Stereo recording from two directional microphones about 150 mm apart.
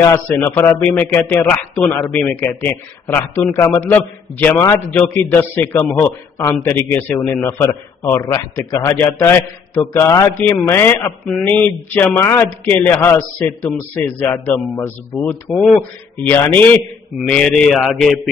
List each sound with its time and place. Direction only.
0.0 s a man's voice: 15° left (ahead or behind)
17.3 s speech: 5° left (ahead or behind)